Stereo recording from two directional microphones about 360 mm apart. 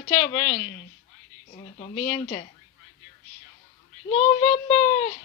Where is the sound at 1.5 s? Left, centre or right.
Centre.